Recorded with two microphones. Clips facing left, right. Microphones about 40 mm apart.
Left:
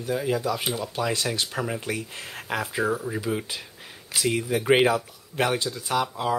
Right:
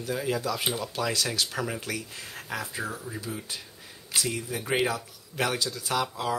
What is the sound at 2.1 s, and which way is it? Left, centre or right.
Speech, left.